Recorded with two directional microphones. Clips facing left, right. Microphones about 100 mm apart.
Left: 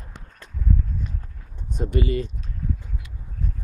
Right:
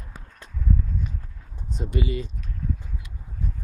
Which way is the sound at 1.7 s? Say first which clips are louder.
Left 4 dB; 50° left (ahead or behind).